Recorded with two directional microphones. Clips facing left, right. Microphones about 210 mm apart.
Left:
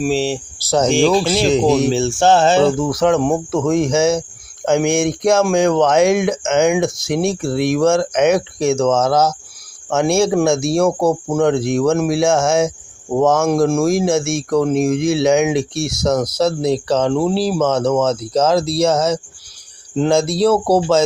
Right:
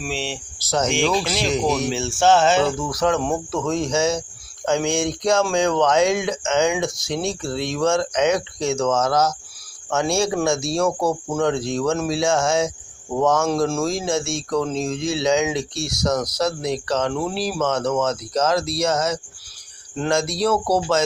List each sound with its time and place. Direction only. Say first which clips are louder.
0.0 s speech: left 10 dB; 40° left (ahead or behind)